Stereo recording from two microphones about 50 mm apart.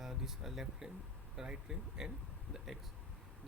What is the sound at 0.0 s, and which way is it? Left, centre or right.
Speech, centre.